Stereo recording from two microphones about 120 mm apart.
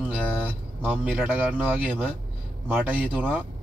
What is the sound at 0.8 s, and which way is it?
Speech, 10° right (ahead or behind).